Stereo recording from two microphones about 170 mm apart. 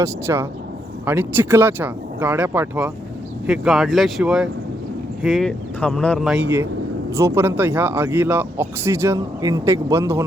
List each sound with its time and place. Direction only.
0.0 s speech: 15° right (ahead or behind); by 6.4 s centre (ahead or behind)
7.1 s speech: 15° right (ahead or behind)